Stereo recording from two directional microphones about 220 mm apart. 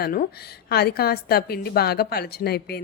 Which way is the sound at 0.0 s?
40° left (ahead or behind).